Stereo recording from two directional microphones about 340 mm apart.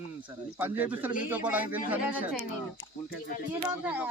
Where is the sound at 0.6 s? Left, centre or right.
Centre.